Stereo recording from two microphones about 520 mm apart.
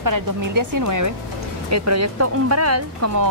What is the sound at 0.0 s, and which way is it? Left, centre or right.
Speech, right.